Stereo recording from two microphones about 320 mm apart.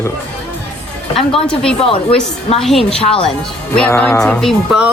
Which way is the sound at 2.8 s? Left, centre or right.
Centre.